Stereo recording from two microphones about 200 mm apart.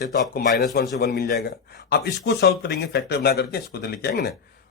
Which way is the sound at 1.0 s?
50° left (ahead or behind).